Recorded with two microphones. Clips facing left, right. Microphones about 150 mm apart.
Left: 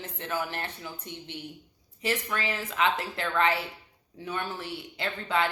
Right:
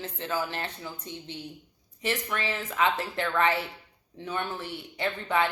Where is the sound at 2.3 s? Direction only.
25° right (ahead or behind).